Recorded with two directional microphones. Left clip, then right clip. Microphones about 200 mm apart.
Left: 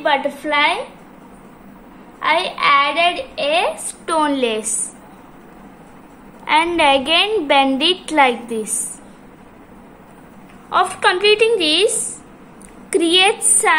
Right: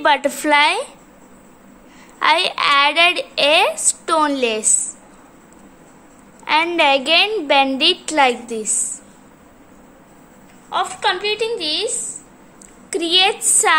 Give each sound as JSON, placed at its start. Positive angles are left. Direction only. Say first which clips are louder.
{"t": 0.0, "sound": "a woman's voice", "louder": "right 2 dB", "side_deg": -45}
{"t": 2.1, "sound": "a woman's voice", "louder": "right 2 dB", "side_deg": -35}
{"t": 4.0, "sound": "a woman's voice", "louder": "even", "side_deg": -20}
{"t": 6.4, "sound": "a woman's voice", "louder": "left 1 dB", "side_deg": -15}
{"t": 10.7, "sound": "a woman's voice", "louder": "left 4 dB", "side_deg": 0}
{"t": 12.9, "sound": "a woman's voice", "louder": "left 2 dB", "side_deg": 0}
{"t": 13.6, "sound": "a woman's voice", "louder": "even", "side_deg": -20}